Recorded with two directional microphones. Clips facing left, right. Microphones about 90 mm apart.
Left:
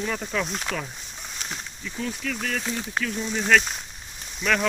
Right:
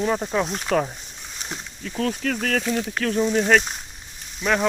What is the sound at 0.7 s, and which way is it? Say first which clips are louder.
Speech: right 10 dB; 50° right (ahead or behind).